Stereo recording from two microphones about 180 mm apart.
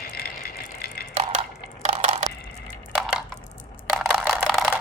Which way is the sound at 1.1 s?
40° right (ahead or behind).